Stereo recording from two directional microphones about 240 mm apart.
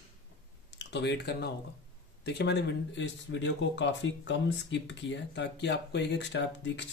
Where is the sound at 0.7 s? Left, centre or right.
Left.